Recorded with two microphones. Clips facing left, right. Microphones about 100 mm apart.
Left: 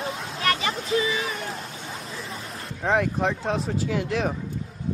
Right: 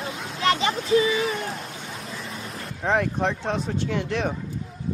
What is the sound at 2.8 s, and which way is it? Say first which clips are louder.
Speech: even; centre (ahead or behind).